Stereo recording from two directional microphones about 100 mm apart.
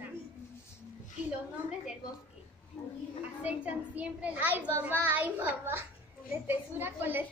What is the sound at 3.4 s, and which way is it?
A child's voice, 15° right (ahead or behind).